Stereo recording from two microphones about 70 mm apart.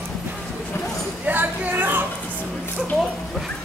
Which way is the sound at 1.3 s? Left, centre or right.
Right.